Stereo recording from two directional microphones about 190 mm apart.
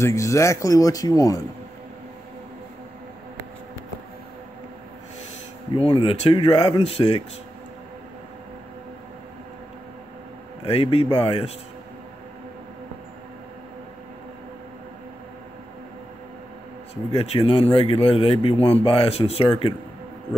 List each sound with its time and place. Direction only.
0.0 s speech: 15° left (ahead or behind)
5.8 s speech: 30° left (ahead or behind)
10.6 s speech: 30° left (ahead or behind)
17.1 s speech: 30° left (ahead or behind)